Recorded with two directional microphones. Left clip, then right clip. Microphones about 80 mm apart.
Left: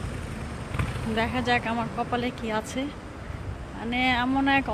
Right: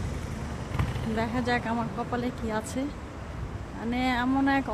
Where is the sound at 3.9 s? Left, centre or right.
Right.